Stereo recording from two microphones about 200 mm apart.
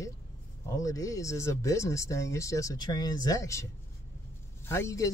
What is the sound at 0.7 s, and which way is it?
Speech, 15° left (ahead or behind).